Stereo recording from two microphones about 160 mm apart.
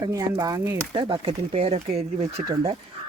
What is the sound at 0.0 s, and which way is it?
Speech, 25° right (ahead or behind).